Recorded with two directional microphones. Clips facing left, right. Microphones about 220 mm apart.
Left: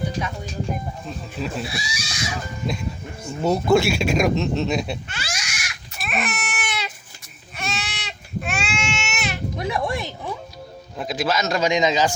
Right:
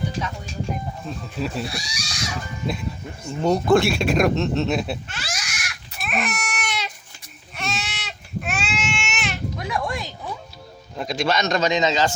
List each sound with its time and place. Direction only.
1.4 s speech: centre (ahead or behind)
6.0 s baby cry: centre (ahead or behind)
7.5 s goat: centre (ahead or behind)
9.6 s a sound: 25° left (ahead or behind)
10.9 s a man's voice: 5° left (ahead or behind)